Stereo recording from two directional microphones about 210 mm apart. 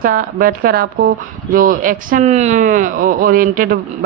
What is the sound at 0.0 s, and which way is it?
A woman's voice, 40° right (ahead or behind).